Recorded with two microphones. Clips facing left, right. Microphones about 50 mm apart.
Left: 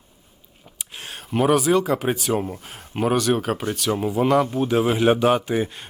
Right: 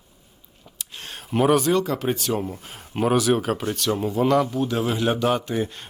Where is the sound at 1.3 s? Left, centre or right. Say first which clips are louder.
Left 1 dB; centre.